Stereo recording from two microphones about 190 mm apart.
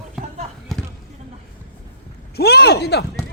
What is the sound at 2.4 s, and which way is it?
Speech, 55° left (ahead or behind).